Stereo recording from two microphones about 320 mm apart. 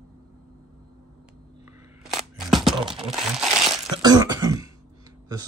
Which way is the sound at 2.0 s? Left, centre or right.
Centre.